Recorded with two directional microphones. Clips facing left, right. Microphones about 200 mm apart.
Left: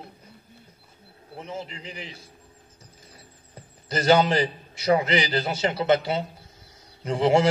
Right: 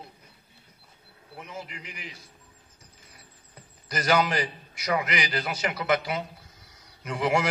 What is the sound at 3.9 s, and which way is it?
A man's voice, 25° left (ahead or behind).